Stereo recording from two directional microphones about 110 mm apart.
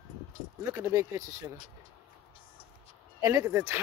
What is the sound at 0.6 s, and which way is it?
Speech, 30° right (ahead or behind).